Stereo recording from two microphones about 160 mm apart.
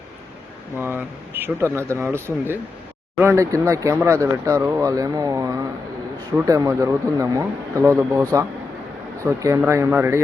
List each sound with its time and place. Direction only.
0.8 s speech: 15° right (ahead or behind)
9.2 s speech: 20° right (ahead or behind)